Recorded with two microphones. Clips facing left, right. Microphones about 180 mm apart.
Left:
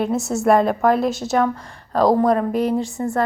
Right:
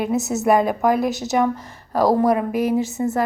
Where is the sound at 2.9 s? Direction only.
20° right (ahead or behind).